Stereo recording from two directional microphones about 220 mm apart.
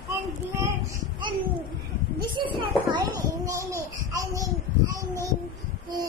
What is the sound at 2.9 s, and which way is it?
Babbling, 15° right (ahead or behind).